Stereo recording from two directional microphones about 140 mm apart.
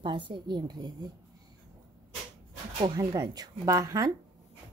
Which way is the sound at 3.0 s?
25° right (ahead or behind).